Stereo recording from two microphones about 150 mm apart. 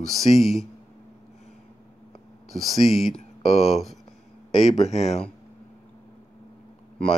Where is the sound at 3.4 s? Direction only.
45° left (ahead or behind).